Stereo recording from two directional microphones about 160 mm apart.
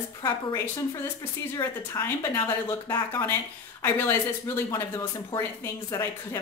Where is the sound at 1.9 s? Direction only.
15° left (ahead or behind).